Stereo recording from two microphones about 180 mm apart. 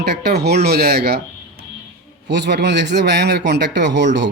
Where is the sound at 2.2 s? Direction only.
75° right (ahead or behind).